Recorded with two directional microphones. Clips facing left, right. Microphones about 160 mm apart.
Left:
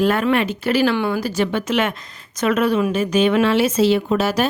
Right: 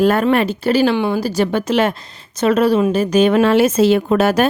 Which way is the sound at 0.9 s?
20° right (ahead or behind).